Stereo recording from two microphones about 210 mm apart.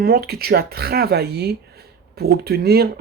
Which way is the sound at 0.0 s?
50° right (ahead or behind).